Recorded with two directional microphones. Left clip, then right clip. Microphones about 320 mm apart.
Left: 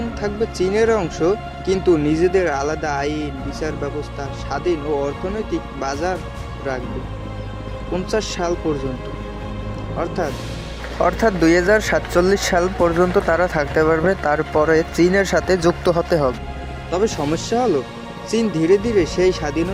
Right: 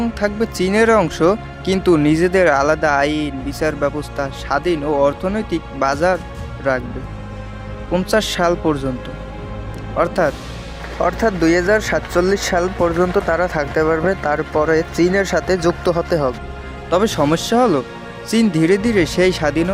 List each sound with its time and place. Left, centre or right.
0.2 s speech: right
7.9 s speech: right
10.0 s speech: right
10.9 s speech: centre
16.9 s speech: right